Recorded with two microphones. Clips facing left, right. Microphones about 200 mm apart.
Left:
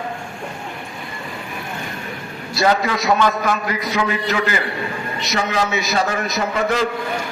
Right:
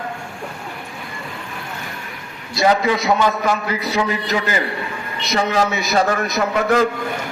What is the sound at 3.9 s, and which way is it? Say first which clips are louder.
Speech: right 1 dB; 30° right (ahead or behind).